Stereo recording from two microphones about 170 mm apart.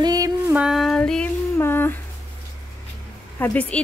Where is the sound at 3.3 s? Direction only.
10° left (ahead or behind).